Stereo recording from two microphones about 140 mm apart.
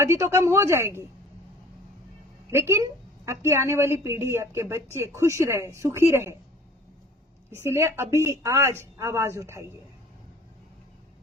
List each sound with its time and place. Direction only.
0.0 s a woman's voice: 20° right (ahead or behind)
2.5 s a woman's voice: 20° right (ahead or behind)
7.6 s a woman's voice: 20° right (ahead or behind)